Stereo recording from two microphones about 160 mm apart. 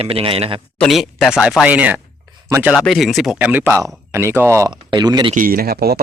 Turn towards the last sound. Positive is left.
turn(degrees=-80)